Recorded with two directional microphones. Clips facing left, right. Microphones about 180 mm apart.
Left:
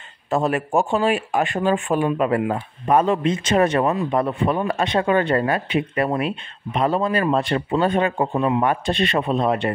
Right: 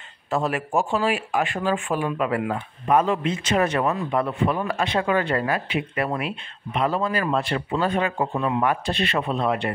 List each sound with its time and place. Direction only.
0.7 s speech: 25° left (ahead or behind)